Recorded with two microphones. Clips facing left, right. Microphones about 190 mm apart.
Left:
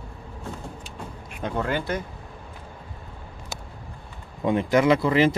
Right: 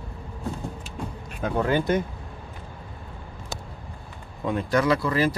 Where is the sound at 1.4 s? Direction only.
10° right (ahead or behind).